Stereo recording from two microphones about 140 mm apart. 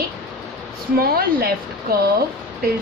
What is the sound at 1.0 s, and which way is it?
Speech, 90° right.